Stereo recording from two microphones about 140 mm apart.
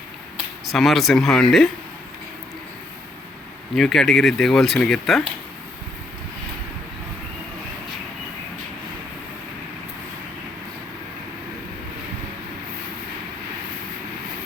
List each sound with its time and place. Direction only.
0.7 s speech: centre (ahead or behind)
3.8 s speech: centre (ahead or behind)